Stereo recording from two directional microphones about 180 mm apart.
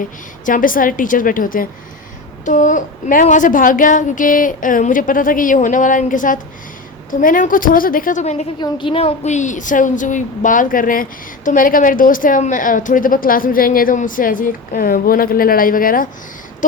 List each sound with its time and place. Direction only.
0.4 s a woman's voice: 50° left (ahead or behind)
8.5 s a woman's voice: 25° left (ahead or behind); by 16.0 s 50° left (ahead or behind)